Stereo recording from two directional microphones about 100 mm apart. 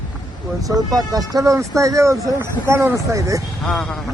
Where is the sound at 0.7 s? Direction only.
40° right (ahead or behind).